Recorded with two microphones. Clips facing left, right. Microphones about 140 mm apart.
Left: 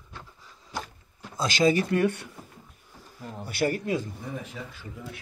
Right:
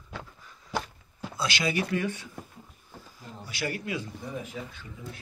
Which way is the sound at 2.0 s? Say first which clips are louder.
Left 7 dB; 60° left (ahead or behind).